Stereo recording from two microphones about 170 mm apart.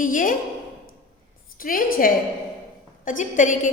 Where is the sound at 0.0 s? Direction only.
50° left (ahead or behind).